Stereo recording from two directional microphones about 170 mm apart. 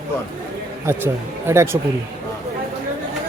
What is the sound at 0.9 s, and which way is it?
Speech, 15° right (ahead or behind).